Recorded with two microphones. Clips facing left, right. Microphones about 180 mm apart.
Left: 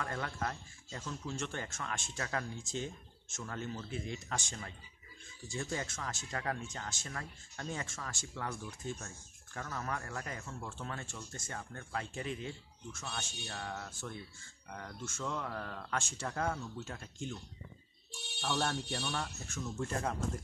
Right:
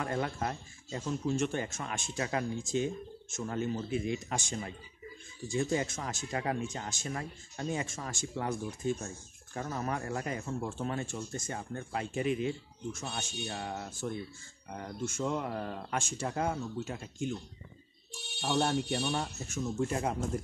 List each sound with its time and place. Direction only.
0.0 s speech: 20° right (ahead or behind)
18.4 s speech: 20° right (ahead or behind)